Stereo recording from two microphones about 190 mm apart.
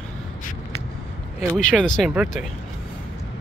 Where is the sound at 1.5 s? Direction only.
5° left (ahead or behind).